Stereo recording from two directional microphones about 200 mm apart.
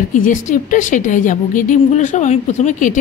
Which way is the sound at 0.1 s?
40° left (ahead or behind).